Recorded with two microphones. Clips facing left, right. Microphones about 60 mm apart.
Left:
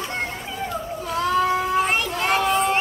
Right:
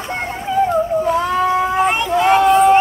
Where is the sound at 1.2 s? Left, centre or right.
Right.